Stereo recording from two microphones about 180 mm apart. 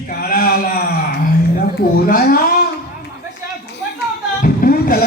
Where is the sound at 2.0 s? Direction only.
55° left (ahead or behind).